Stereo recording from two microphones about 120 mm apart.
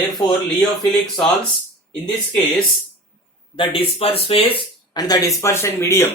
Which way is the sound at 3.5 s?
45° left (ahead or behind).